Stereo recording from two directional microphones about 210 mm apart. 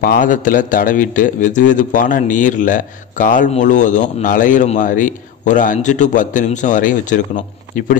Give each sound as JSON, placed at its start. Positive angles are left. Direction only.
{"t": 0.0, "sound": "a man's voice", "side_deg": 40}